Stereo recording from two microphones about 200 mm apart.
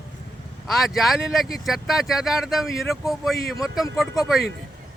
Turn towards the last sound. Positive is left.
turn(degrees=0)  # may be behind; listen again after turning